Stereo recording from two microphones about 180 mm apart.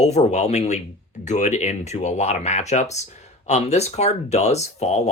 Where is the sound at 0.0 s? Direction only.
40° left (ahead or behind).